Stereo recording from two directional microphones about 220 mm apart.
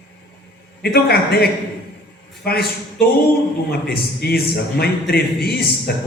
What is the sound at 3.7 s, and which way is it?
A man's voice, 45° left (ahead or behind).